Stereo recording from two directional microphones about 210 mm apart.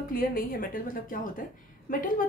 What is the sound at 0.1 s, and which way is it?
A woman's voice, 45° left (ahead or behind).